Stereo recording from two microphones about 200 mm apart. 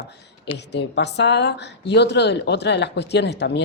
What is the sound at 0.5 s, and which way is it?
A woman's voice, 60° left (ahead or behind).